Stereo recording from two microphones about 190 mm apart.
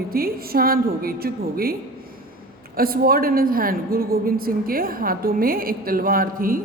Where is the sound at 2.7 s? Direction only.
50° right (ahead or behind).